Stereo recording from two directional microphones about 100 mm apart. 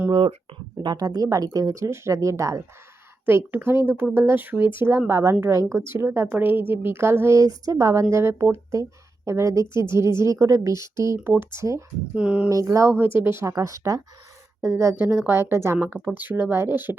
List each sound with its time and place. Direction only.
0.1 s speech: 65° right (ahead or behind)
0.8 s speech: 45° right (ahead or behind); by 11.8 s 30° right (ahead or behind)
12.1 s speech: 10° right (ahead or behind)
12.5 s speech: 35° right (ahead or behind)